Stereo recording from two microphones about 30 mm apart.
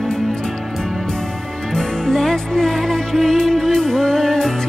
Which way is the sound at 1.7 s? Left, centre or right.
Centre.